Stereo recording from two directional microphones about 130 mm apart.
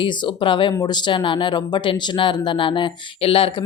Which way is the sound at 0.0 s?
35° left (ahead or behind).